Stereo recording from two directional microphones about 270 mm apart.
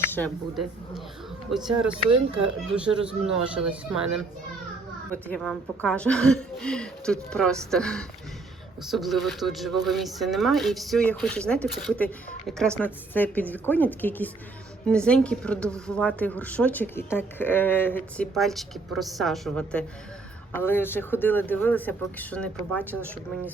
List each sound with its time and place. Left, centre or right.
0.1 s speech: centre